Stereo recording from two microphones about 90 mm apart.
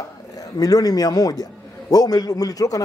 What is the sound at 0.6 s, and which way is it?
A man's voice, 45° left (ahead or behind).